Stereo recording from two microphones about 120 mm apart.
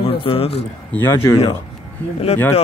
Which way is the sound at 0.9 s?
20° left (ahead or behind).